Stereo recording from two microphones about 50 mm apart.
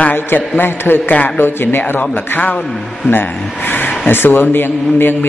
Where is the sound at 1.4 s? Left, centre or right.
Left.